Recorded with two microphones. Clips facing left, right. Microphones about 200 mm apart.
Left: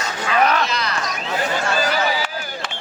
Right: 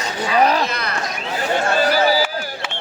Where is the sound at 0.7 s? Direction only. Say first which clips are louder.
Left 1 dB; 55° right (ahead or behind).